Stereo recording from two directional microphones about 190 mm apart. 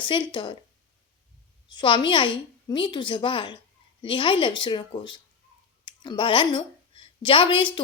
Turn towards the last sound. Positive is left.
turn(degrees=25)  # may be behind; listen again after turning